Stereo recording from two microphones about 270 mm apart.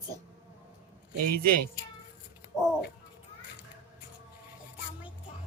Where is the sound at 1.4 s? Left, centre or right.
Right.